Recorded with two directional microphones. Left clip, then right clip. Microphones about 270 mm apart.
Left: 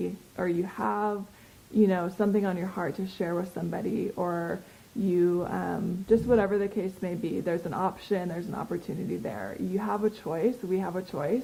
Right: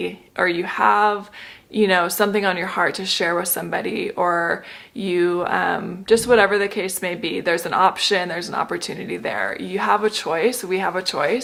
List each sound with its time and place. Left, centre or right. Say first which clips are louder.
0.0 s speech: right 11 dB; centre